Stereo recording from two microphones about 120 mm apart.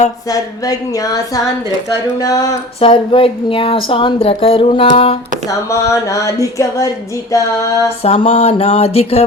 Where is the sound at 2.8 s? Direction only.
50° left (ahead or behind).